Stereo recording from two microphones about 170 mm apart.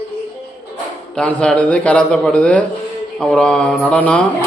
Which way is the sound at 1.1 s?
5° left (ahead or behind).